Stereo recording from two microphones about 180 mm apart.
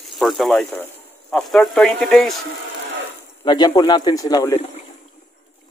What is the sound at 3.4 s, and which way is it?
Speech, 25° left (ahead or behind).